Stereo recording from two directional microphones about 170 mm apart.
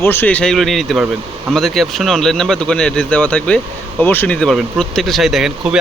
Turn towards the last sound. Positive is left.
turn(degrees=-5)  # may be behind; listen again after turning